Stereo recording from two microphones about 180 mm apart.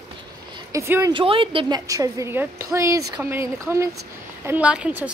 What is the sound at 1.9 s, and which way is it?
A woman's voice, 20° right (ahead or behind).